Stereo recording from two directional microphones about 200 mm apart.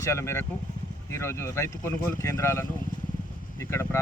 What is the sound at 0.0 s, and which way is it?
Speech, 15° left (ahead or behind).